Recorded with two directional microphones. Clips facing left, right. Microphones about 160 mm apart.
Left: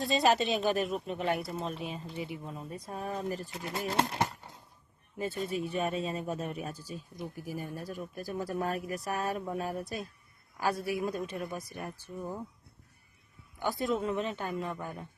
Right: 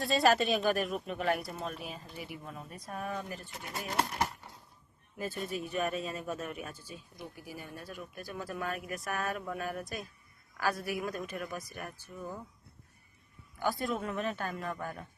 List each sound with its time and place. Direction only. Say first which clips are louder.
0.0 s speech: even; 20° left (ahead or behind)
13.6 s speech: left 2 dB; 20° left (ahead or behind)